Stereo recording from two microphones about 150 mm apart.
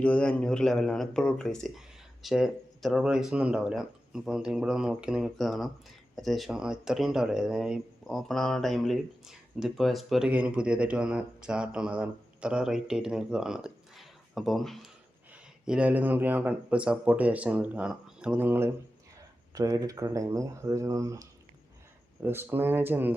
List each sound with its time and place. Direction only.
0.0 s speech: 10° left (ahead or behind); by 23.1 s 15° right (ahead or behind)